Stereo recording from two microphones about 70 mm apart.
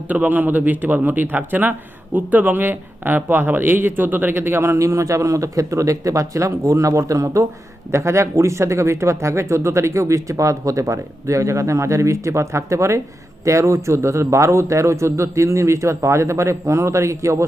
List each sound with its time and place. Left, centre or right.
0.1 s a man's voice: right